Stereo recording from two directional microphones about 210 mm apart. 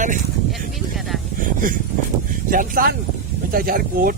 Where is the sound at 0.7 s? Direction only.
Centre (ahead or behind).